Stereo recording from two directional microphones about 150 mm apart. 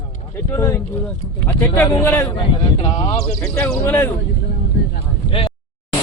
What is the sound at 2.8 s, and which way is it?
Speech, 35° left (ahead or behind).